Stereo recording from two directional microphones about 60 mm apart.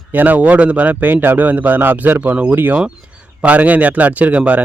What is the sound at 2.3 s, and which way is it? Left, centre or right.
Speech, right.